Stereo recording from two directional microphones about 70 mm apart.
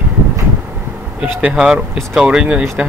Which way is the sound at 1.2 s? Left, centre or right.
Centre.